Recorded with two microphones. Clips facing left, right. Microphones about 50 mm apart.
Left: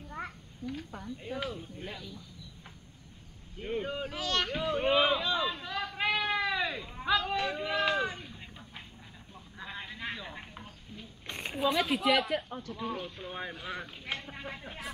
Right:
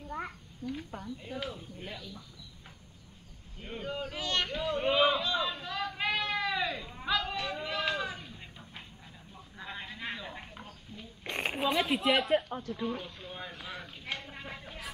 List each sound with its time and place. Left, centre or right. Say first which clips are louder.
0.1 s a sound: right 2 dB; centre
1.2 s speech: left 4 dB; centre
1.5 s speech: left 2 dB; centre
3.5 s speech: left 4 dB; centre
4.1 s speech: even; centre
4.5 s a sound: left 1 dB; centre
9.6 s sheep: even; centre
11.3 s a sound: right 4 dB; right
11.6 s speech: left 1 dB; centre
12.7 s speech: left 1 dB; centre
13.2 s speech: left 4 dB; centre
14.1 s a sound: left 2 dB; centre
14.6 s speech: left 2 dB; centre